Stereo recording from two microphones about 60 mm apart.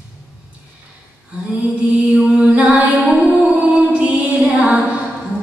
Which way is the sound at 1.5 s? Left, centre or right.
Right.